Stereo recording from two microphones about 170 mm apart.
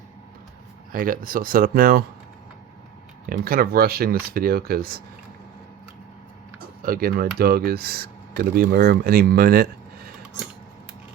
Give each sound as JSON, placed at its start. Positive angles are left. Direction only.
{"t": 0.9, "sound": "speech", "side_deg": -55}
{"t": 3.2, "sound": "speech", "side_deg": -60}
{"t": 6.8, "sound": "speech", "side_deg": -60}